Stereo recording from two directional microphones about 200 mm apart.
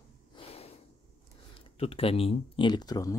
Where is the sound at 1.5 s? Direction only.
30° left (ahead or behind).